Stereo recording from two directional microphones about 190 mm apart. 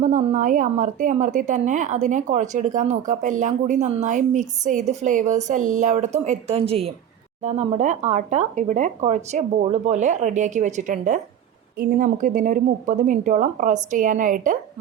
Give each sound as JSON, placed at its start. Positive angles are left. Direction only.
{"t": 0.0, "sound": "a woman's voice", "side_deg": -40}